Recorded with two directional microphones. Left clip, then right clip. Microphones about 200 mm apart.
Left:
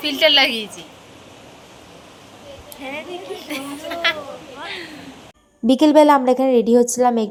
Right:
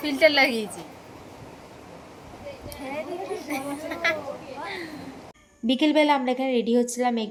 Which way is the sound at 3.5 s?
15° right (ahead or behind).